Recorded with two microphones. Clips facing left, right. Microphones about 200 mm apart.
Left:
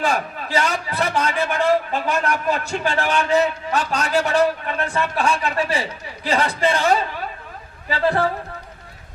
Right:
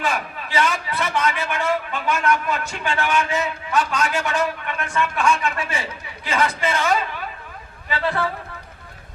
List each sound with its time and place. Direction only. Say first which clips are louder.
0.0 s a man's voice: left 3 dB; 40° left (ahead or behind)